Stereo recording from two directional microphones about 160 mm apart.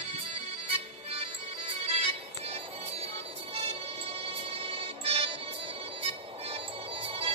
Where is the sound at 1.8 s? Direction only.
40° right (ahead or behind).